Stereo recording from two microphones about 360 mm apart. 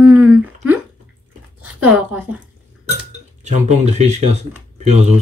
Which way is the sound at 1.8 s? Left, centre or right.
Centre.